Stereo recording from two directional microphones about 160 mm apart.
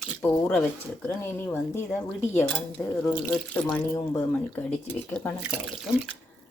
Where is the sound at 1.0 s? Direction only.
15° left (ahead or behind).